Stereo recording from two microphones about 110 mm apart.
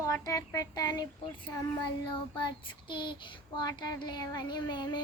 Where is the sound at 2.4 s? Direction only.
45° left (ahead or behind).